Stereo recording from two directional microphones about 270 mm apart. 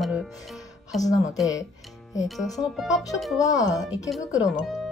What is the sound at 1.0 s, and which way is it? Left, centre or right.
Speech, centre.